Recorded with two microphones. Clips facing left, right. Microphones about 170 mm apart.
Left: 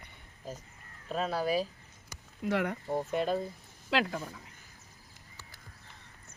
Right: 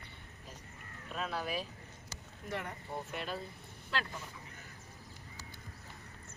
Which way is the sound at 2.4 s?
90° left.